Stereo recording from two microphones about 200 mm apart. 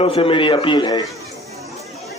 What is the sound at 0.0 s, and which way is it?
A man's voice, 30° left (ahead or behind).